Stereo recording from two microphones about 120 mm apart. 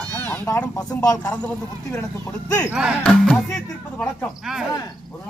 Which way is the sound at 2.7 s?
10° right (ahead or behind).